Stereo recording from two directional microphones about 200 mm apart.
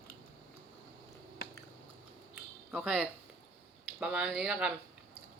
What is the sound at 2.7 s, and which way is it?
Speech, 5° right (ahead or behind).